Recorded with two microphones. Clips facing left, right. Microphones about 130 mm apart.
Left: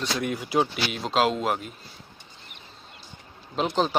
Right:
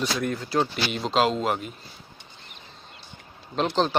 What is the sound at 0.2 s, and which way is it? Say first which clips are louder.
Speech: left 4 dB; 10° left (ahead or behind).